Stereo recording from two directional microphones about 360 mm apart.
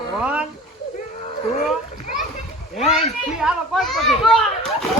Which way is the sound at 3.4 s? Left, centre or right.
Centre.